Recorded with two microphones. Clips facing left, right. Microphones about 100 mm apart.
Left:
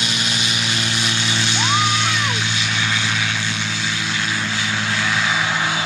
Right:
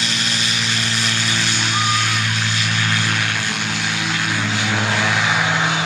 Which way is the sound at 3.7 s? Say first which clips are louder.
Right 2 dB; 70° right (ahead or behind).